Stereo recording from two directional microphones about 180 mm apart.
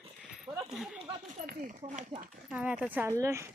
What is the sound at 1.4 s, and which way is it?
Speech, 50° right (ahead or behind).